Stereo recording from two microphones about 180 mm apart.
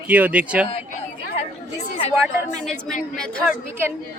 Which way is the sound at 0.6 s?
35° left (ahead or behind).